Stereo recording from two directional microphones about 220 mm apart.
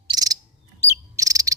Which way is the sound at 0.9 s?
15° right (ahead or behind).